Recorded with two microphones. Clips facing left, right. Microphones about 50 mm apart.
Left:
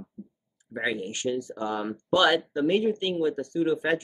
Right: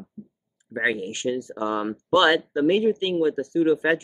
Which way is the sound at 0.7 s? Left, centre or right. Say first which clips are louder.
Right 5 dB; centre.